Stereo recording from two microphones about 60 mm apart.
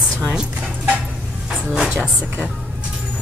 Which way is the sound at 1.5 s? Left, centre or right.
Centre.